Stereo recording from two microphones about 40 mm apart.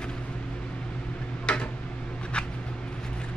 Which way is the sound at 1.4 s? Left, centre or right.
Left.